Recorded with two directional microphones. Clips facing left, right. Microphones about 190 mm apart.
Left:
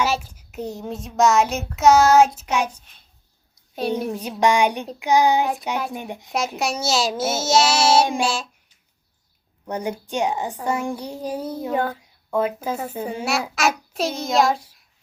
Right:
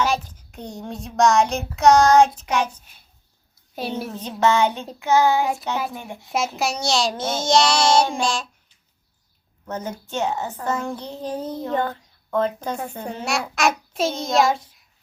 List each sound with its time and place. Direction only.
0.0 s a child's voice: 5° left (ahead or behind)
3.5 s a sound: 5° right (ahead or behind)
4.0 s a child's voice: 10° left (ahead or behind)
6.6 s a child's voice: centre (ahead or behind)
9.6 s a child's voice: 15° left (ahead or behind)